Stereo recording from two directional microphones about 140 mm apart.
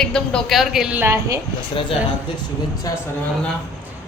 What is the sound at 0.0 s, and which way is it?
A woman's voice, 5° left (ahead or behind).